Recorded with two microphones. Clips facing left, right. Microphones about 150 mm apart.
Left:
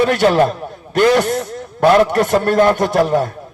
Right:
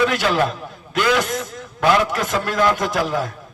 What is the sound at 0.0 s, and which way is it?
A man's voice, 60° left (ahead or behind).